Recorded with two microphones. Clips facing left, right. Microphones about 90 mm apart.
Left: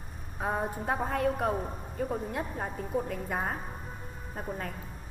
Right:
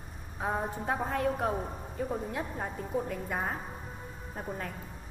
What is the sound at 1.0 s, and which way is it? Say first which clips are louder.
Speech: left 2 dB; 50° left (ahead or behind).